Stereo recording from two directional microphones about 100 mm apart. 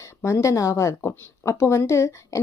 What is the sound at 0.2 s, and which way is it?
A woman's voice, 30° left (ahead or behind).